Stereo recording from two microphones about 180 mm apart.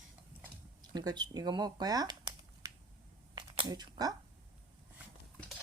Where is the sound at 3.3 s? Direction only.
25° right (ahead or behind).